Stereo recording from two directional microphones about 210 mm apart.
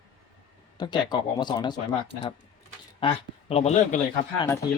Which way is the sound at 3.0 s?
25° left (ahead or behind).